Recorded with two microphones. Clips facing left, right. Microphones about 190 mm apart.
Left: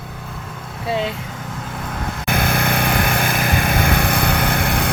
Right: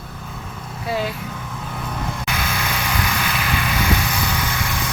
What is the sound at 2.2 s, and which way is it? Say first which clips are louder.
Vehicle: left 6 dB; 55° left (ahead or behind).